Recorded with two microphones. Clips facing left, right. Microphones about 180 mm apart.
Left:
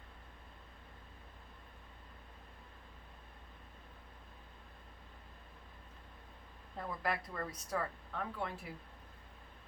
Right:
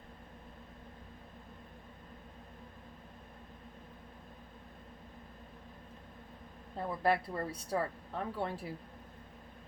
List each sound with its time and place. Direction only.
6.7 s speech: 30° right (ahead or behind)